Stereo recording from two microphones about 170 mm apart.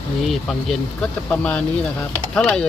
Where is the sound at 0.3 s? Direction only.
5° left (ahead or behind).